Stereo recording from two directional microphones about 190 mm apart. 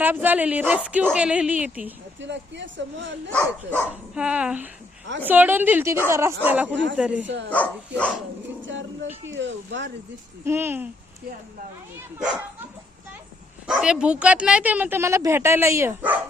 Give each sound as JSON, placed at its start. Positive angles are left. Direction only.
{"t": 0.0, "sound": "speech", "side_deg": -10}
{"t": 2.2, "sound": "speech", "side_deg": -70}
{"t": 3.3, "sound": "speech", "side_deg": 10}
{"t": 3.8, "sound": "speech", "side_deg": -5}
{"t": 7.5, "sound": "speech", "side_deg": 5}
{"t": 8.6, "sound": "speech", "side_deg": -80}
{"t": 10.4, "sound": "speech", "side_deg": -10}
{"t": 13.7, "sound": "speech", "side_deg": -5}